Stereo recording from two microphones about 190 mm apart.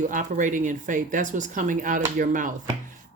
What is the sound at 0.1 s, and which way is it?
Speech, 45° right (ahead or behind).